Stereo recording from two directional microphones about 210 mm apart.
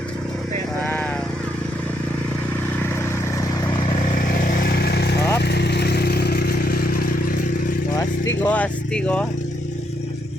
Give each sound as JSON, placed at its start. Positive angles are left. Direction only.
{"t": 4.6, "sound": "vehicle", "side_deg": 45}
{"t": 7.9, "sound": "vehicle", "side_deg": 15}